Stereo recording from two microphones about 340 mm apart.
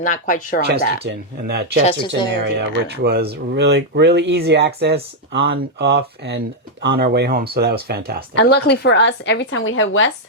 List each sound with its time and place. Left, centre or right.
0.0 s speech: left
1.0 s speech: right
1.8 s speech: centre
2.3 s speech: right
8.4 s speech: left